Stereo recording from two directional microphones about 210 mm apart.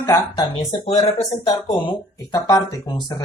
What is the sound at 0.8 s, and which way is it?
Speech, 30° left (ahead or behind).